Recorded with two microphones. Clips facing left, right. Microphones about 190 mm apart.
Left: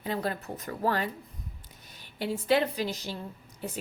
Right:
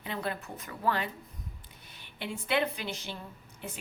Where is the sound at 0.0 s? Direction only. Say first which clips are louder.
Left 4 dB; 40° left (ahead or behind).